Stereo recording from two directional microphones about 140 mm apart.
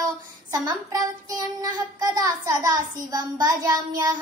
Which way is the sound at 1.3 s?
25° right (ahead or behind).